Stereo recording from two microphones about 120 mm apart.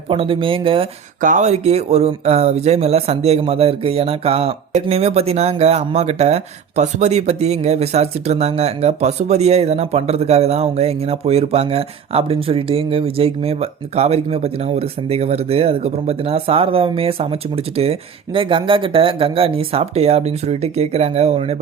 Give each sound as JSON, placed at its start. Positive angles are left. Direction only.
{"t": 0.1, "sound": "speech", "side_deg": -50}
{"t": 1.2, "sound": "speech", "side_deg": -85}
{"t": 18.3, "sound": "speech", "side_deg": -45}